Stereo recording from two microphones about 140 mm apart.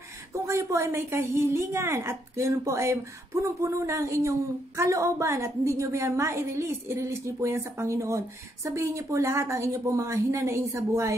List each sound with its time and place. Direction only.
0.3 s a woman's voice: 20° right (ahead or behind)